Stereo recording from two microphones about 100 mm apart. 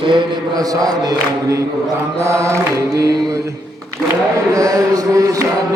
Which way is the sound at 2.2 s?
30° right (ahead or behind).